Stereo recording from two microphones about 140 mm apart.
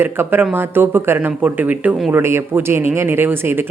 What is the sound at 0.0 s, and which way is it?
Speech, 15° right (ahead or behind).